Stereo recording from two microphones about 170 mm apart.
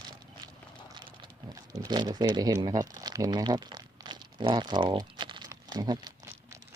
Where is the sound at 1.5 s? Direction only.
25° right (ahead or behind).